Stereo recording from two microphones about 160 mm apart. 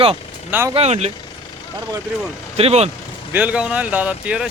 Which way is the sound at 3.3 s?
10° right (ahead or behind).